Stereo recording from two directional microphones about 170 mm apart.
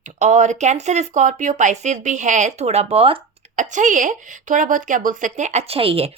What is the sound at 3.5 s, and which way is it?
Speech, 45° right (ahead or behind).